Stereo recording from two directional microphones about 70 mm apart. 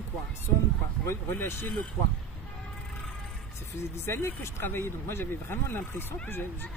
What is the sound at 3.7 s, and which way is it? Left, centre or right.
Speech, left.